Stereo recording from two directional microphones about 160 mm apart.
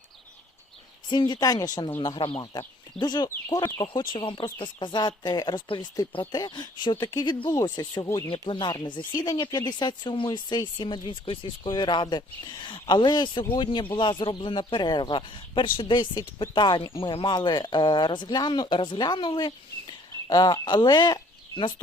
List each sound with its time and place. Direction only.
1.1 s speech: 30° left (ahead or behind)